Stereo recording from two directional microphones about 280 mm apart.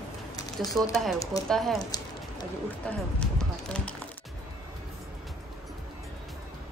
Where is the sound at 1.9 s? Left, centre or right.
Centre.